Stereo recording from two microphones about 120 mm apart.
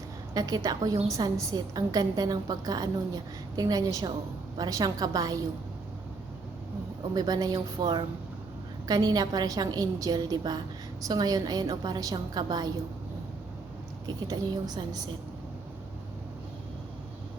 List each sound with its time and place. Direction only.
0.3 s a woman's voice: 30° right (ahead or behind)
7.1 s a woman's voice: 35° right (ahead or behind)
14.3 s a woman's voice: 35° right (ahead or behind)